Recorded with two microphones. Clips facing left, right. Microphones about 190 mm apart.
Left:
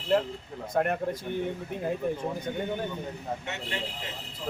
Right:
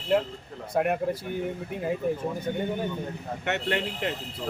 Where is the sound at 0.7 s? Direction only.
5° right (ahead or behind).